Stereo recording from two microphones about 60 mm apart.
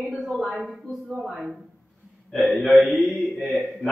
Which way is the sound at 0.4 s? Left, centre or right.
Centre.